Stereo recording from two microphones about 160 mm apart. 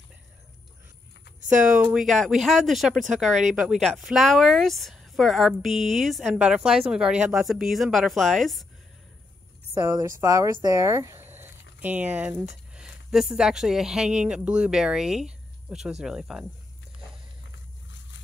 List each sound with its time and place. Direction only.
1.5 s speech: 55° right (ahead or behind)
1.8 s speech: 5° right (ahead or behind)
9.8 s speech: 25° right (ahead or behind); by 16.4 s 5° right (ahead or behind)